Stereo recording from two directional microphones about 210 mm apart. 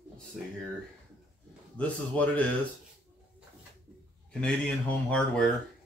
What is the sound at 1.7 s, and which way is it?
Speech, 5° left (ahead or behind).